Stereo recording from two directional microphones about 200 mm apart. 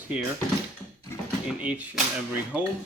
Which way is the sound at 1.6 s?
5° right (ahead or behind).